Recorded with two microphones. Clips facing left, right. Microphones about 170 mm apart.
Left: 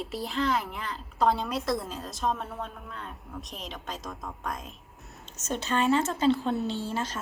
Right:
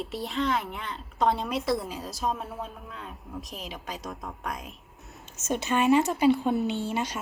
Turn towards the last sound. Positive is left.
turn(degrees=-60)  # may be behind; listen again after turning